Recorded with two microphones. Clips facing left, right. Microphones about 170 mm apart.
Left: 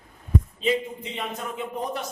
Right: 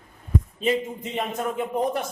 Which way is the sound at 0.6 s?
45° right (ahead or behind).